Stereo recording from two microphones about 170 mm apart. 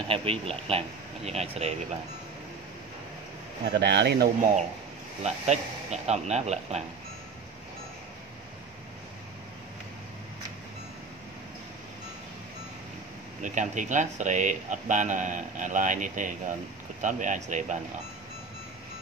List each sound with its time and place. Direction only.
0.1 s speech: 35° right (ahead or behind)
3.7 s speech: 90° right
5.2 s speech: 40° right (ahead or behind)
13.4 s speech: 45° right (ahead or behind)